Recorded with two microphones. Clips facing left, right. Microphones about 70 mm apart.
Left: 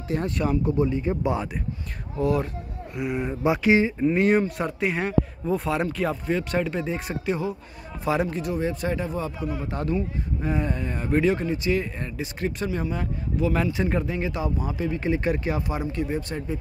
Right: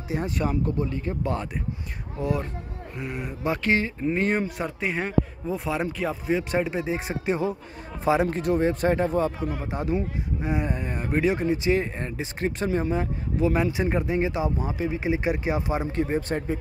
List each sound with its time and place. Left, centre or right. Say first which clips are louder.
0.1 s speech: left 2 dB; centre
0.7 s speech: left 4 dB; centre
3.0 s speech: left 6 dB; centre
4.0 s speech: left 4 dB; centre
6.3 s speech: right 1 dB; centre
7.2 s a man's voice: right 2 dB; right
8.3 s speech: right 4 dB; right
9.7 s speech: even; centre
11.4 s speech: right 2 dB; right